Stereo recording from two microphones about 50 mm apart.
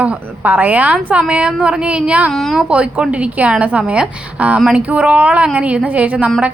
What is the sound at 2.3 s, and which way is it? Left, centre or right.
Speech, centre.